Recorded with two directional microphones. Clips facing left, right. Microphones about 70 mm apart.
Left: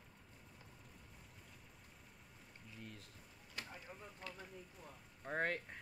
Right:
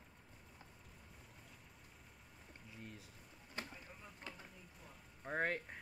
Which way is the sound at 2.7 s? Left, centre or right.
Centre.